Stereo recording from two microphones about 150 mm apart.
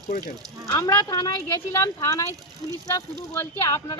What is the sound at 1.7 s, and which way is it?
Speech, 20° left (ahead or behind).